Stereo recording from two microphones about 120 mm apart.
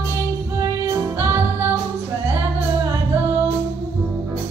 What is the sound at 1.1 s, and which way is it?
Music, 20° right (ahead or behind).